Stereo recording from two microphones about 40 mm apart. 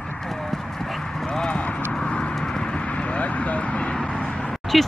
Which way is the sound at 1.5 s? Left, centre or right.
Left.